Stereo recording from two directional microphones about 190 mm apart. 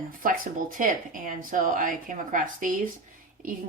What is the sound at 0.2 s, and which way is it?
Speech, 45° right (ahead or behind).